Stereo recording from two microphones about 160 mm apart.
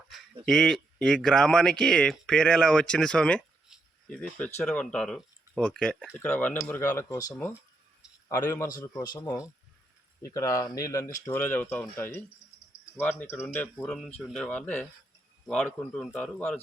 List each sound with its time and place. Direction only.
0.4 s speech: centre (ahead or behind)